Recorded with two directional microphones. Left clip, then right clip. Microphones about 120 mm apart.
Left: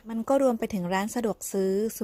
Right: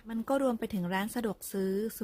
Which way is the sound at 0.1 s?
25° left (ahead or behind).